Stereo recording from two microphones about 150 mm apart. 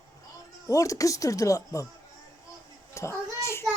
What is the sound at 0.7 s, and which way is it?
Speech, 20° left (ahead or behind).